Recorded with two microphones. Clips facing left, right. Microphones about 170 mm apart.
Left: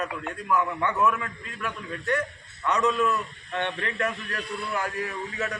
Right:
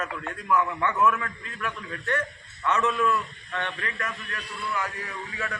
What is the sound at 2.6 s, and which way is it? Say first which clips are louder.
A man's voice: left 1 dB; 15° left (ahead or behind).